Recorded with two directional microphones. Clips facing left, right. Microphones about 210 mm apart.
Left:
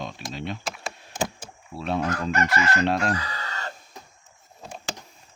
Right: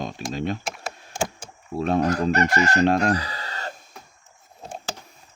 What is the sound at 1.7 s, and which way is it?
Chicken, 45° right (ahead or behind).